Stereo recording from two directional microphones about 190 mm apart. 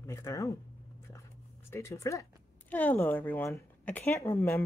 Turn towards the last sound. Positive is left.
turn(degrees=15)  # may be behind; listen again after turning